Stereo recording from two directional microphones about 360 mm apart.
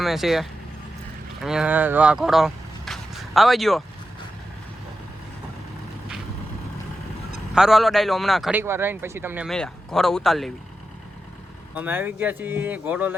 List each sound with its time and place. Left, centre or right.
0.0 s speech: centre
7.5 s speech: centre
11.7 s speech: centre